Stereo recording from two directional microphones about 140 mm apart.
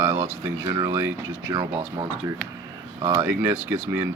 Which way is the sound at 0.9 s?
15° right (ahead or behind).